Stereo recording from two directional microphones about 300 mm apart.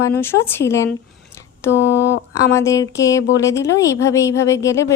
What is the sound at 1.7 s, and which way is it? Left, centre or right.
Speech, left.